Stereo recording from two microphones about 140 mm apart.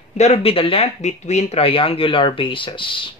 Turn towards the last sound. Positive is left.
turn(degrees=35)  # may be behind; listen again after turning